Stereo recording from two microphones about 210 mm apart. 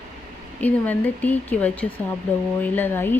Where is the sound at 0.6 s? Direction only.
10° left (ahead or behind).